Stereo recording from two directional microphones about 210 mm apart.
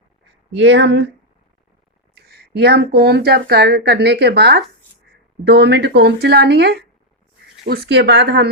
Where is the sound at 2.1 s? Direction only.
50° right (ahead or behind).